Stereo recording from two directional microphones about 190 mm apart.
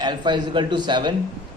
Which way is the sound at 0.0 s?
25° right (ahead or behind).